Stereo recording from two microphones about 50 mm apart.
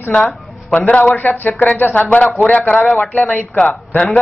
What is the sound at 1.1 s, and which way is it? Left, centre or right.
Speech, left.